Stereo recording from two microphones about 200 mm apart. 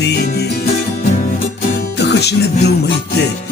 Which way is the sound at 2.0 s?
55° left (ahead or behind).